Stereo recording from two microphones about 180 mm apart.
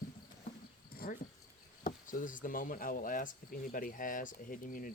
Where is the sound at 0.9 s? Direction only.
55° left (ahead or behind).